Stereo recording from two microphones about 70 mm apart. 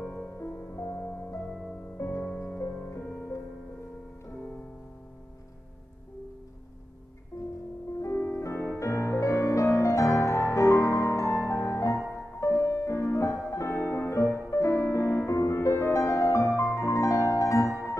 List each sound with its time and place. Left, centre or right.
0.0 s music: left
1.5 s music: centre
2.0 s music: left
8.0 s music: left